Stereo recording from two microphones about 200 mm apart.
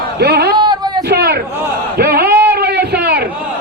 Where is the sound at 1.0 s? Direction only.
55° right (ahead or behind).